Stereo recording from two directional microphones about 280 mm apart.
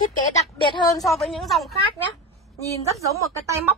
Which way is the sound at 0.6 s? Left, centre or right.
Centre.